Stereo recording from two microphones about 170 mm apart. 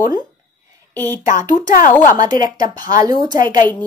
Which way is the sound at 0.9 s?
10° left (ahead or behind).